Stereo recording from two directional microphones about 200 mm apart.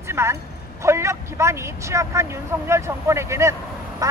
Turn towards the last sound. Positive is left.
turn(degrees=-15)  # may be behind; listen again after turning